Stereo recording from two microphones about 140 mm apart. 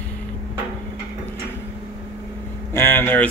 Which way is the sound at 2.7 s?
15° left (ahead or behind).